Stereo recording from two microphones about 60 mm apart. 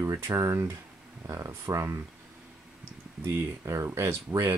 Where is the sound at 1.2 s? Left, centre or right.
Right.